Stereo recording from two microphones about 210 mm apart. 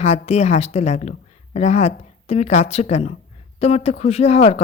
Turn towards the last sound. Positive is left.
turn(degrees=30)  # may be behind; listen again after turning